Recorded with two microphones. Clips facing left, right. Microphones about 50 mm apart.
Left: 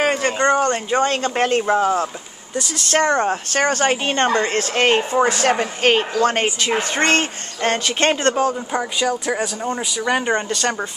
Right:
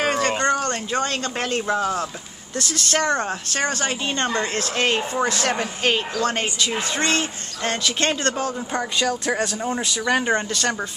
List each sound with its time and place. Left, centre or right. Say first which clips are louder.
0.0 s a sound: left 2 dB; left
0.4 s speech: left 5 dB; left
2.5 s speech: left 2 dB; centre
2.9 s speech: left 5 dB; left
3.5 s speech: left 6 dB; left
8.7 s speech: left 2 dB; centre